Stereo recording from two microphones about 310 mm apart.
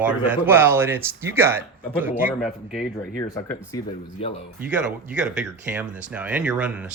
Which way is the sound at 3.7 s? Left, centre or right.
Centre.